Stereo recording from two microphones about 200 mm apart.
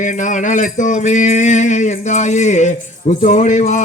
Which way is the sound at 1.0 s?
35° left (ahead or behind).